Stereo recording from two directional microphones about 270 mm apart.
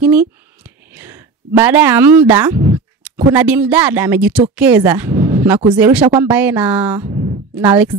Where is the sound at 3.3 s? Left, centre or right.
Centre.